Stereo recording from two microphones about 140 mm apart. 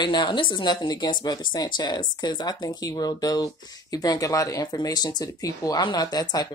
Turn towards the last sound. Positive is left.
turn(degrees=30)  # may be behind; listen again after turning